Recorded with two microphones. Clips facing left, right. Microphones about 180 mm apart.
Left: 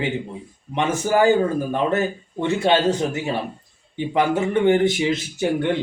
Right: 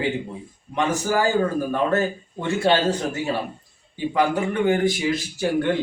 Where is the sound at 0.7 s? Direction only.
20° left (ahead or behind).